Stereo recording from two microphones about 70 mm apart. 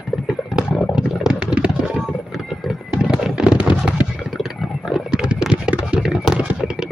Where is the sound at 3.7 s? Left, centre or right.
Centre.